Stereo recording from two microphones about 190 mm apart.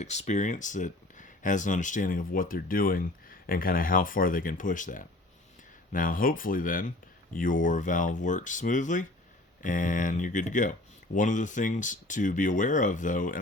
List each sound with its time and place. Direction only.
0.0 s speech: 35° left (ahead or behind)